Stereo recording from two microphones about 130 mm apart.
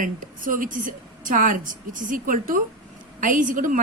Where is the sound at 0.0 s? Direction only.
90° right.